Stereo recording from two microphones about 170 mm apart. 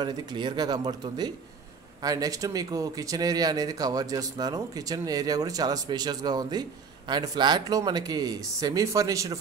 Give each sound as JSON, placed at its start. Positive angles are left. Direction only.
{"t": 0.0, "sound": "a man's voice", "side_deg": -25}